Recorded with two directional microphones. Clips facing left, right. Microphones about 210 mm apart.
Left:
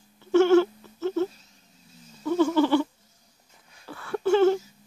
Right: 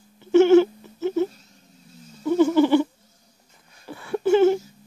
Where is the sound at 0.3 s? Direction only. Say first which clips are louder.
Right 4 dB; 20° right (ahead or behind).